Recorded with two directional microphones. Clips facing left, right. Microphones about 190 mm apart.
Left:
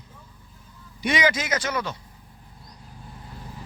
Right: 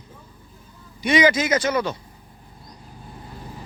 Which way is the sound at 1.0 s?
5° left (ahead or behind).